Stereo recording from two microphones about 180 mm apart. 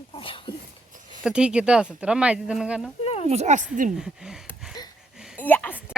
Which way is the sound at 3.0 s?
35° left (ahead or behind).